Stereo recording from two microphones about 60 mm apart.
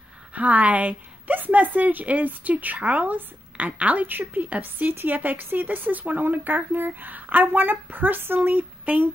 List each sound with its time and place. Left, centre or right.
0.3 s a woman's voice: right